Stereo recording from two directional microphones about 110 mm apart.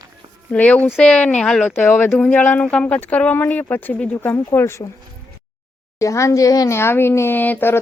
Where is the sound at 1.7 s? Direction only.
20° left (ahead or behind).